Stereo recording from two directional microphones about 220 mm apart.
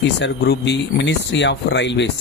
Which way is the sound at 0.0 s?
50° left (ahead or behind).